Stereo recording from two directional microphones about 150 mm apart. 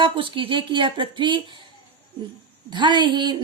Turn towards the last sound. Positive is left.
turn(degrees=-30)  # may be behind; listen again after turning